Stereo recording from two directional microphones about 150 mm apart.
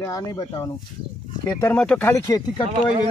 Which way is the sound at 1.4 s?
20° left (ahead or behind).